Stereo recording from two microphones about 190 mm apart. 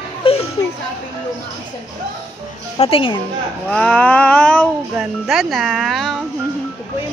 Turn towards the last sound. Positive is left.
turn(degrees=0)  # may be behind; listen again after turning